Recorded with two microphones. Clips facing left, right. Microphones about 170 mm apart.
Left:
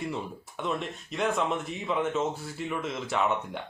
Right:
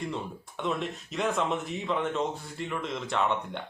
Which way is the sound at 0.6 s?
Centre (ahead or behind).